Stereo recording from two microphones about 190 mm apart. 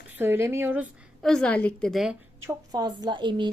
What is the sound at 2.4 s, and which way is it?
A woman's voice, 15° right (ahead or behind).